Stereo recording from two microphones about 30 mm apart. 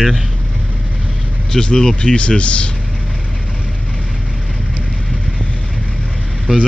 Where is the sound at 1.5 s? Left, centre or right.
Left.